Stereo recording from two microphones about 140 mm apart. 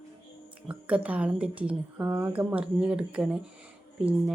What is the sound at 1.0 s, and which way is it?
Speech, 10° right (ahead or behind).